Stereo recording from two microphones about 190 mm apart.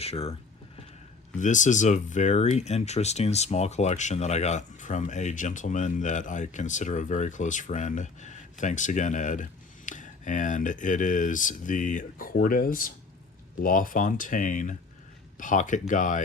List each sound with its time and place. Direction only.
0.0 s speech: 30° left (ahead or behind)
1.4 s speech: 40° left (ahead or behind)